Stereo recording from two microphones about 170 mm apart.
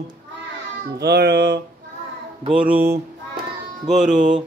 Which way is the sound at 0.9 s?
75° right (ahead or behind).